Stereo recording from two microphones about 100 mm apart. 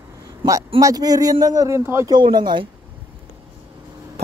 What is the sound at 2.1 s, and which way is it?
Speech, 45° right (ahead or behind).